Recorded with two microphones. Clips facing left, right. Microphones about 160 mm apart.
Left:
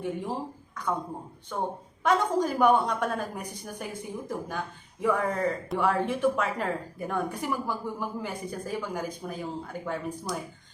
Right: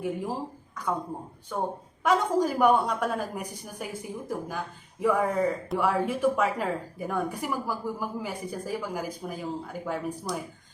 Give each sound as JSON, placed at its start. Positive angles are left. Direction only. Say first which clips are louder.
{"t": 0.0, "sound": "speech", "louder": "right 1 dB", "side_deg": -5}
{"t": 1.5, "sound": "speech", "louder": "right 1 dB", "side_deg": -5}